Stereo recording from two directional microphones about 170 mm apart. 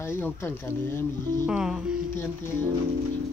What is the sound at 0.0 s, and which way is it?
Speech, 15° left (ahead or behind).